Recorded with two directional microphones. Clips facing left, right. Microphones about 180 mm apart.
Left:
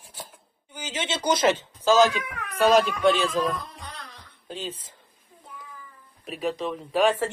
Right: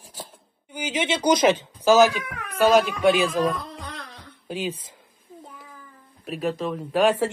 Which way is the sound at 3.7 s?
80° right.